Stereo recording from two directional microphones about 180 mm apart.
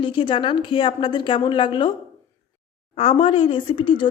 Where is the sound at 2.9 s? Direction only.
30° left (ahead or behind).